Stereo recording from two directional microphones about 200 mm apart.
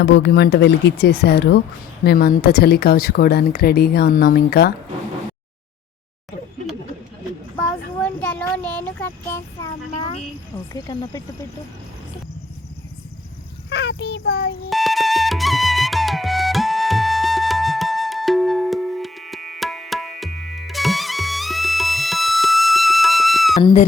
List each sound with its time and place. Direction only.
0.0 s speech: 60° left (ahead or behind)
8.0 s a child's voice: 10° left (ahead or behind)
13.7 s speech: 60° left (ahead or behind)
14.7 s flute: centre (ahead or behind)
23.6 s speech: 30° left (ahead or behind)